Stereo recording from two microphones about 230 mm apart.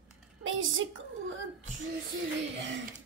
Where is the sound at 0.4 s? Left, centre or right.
Right.